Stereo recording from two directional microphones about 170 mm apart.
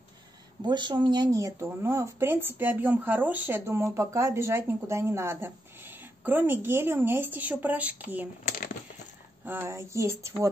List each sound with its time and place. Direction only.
0.7 s speech: 25° right (ahead or behind); by 8.3 s 10° right (ahead or behind)
9.4 s speech: 15° right (ahead or behind)